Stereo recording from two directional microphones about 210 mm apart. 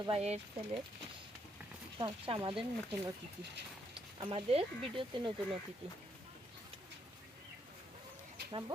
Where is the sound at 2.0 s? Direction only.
25° right (ahead or behind).